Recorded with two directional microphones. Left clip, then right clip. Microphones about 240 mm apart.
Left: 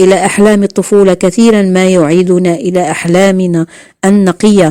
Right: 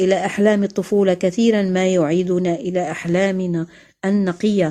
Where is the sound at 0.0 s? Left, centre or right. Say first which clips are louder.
Left 10 dB; left.